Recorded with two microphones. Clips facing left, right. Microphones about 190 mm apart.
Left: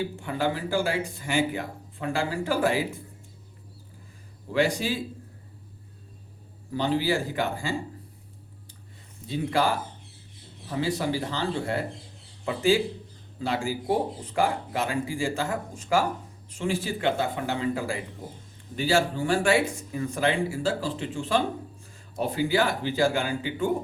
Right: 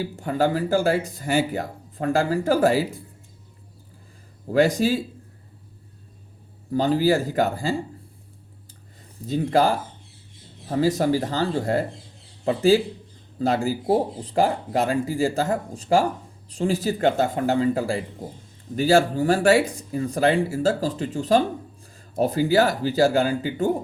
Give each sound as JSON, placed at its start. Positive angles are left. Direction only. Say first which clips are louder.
{"t": 0.0, "sound": "speech", "louder": "right 5 dB", "side_deg": -40}
{"t": 4.5, "sound": "speech", "louder": "right 6 dB", "side_deg": -40}
{"t": 6.7, "sound": "speech", "louder": "right 6 dB", "side_deg": -40}
{"t": 9.2, "sound": "speech", "louder": "right 5 dB", "side_deg": -40}